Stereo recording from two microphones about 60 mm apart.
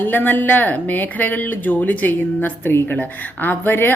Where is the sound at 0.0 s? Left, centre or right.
Left.